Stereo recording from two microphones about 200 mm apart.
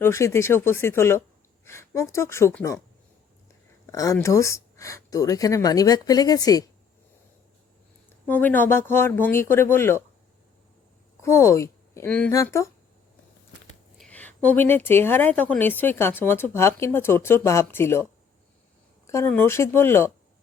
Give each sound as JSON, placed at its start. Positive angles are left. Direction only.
{"t": 0.0, "sound": "speech", "side_deg": 15}
{"t": 3.9, "sound": "speech", "side_deg": 15}
{"t": 8.3, "sound": "speech", "side_deg": 10}
{"t": 11.2, "sound": "speech", "side_deg": 15}
{"t": 14.0, "sound": "speech", "side_deg": 10}